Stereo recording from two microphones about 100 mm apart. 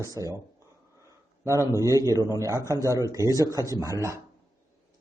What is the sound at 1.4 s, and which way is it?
A man's voice, 30° right (ahead or behind).